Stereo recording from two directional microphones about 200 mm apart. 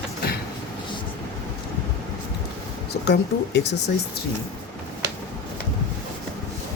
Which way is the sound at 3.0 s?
60° left (ahead or behind).